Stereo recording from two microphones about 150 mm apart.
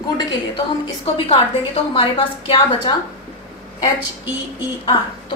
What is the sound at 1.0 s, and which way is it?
A woman's voice, 40° left (ahead or behind).